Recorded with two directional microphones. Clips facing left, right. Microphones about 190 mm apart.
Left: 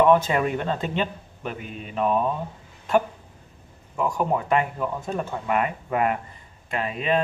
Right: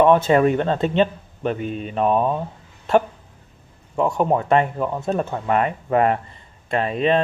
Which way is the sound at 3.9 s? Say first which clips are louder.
Right 5 dB; 25° right (ahead or behind).